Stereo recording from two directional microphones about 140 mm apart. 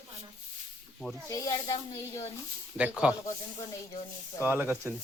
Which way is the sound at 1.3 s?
20° left (ahead or behind).